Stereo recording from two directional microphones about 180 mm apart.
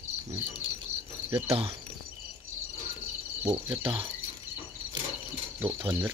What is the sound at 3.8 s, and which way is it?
Speech, 30° right (ahead or behind).